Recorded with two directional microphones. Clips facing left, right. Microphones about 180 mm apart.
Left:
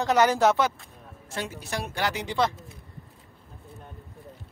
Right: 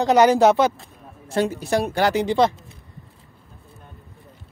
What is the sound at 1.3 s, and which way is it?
Speech, 35° right (ahead or behind).